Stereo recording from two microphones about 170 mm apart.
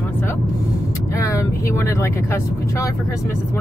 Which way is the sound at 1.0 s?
15° left (ahead or behind).